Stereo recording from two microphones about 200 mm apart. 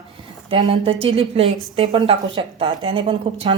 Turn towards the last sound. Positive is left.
turn(degrees=-25)  # may be behind; listen again after turning